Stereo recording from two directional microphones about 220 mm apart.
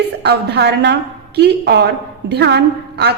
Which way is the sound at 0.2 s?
50° right (ahead or behind).